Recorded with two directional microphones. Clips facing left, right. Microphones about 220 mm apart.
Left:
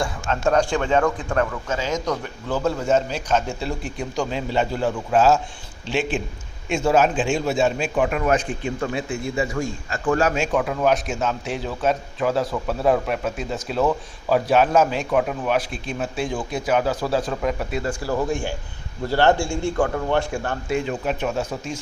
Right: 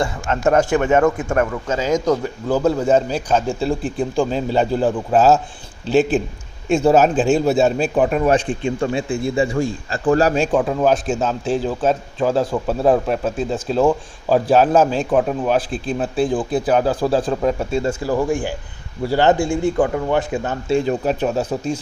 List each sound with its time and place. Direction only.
1.3 s speech: 25° right (ahead or behind)
2.5 s speech: 35° right (ahead or behind)
18.0 s a man's voice: 15° right (ahead or behind)
20.7 s speech: 35° right (ahead or behind)